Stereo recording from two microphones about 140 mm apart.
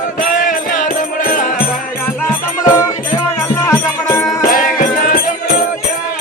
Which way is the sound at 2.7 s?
20° left (ahead or behind).